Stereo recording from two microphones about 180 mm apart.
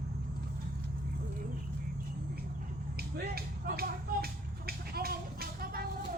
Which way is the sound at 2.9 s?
60° right (ahead or behind).